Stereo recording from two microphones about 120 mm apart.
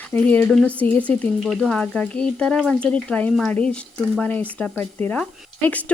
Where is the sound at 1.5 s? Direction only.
Centre (ahead or behind).